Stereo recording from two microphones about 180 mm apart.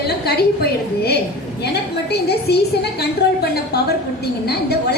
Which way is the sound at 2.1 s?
65° left (ahead or behind).